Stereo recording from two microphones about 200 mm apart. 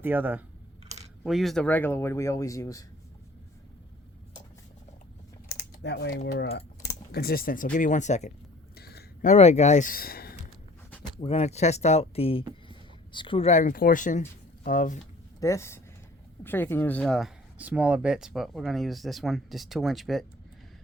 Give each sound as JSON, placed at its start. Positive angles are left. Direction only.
{"t": 0.0, "sound": "speech", "side_deg": -10}
{"t": 5.5, "sound": "speech", "side_deg": 55}
{"t": 8.7, "sound": "a sound", "side_deg": 50}
{"t": 9.3, "sound": "speech", "side_deg": 35}
{"t": 11.2, "sound": "speech", "side_deg": 30}
{"t": 15.4, "sound": "speech", "side_deg": 15}